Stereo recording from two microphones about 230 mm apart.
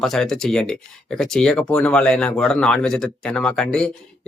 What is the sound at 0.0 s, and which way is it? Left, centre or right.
Speech, centre.